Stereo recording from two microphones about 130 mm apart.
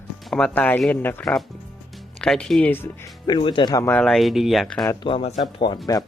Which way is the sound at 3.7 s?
20° left (ahead or behind).